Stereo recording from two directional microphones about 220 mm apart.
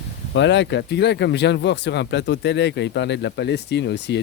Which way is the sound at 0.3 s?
55° left (ahead or behind).